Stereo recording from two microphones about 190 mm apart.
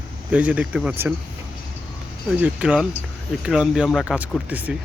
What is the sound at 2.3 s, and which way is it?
Speech, 10° right (ahead or behind).